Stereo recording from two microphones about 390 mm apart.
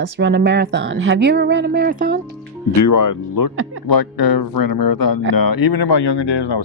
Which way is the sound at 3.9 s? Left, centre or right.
Left.